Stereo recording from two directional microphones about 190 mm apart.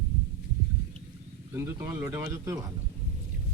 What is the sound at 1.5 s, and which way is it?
A woman's voice, 10° right (ahead or behind).